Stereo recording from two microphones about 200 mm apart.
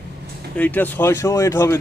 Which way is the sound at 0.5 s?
10° left (ahead or behind).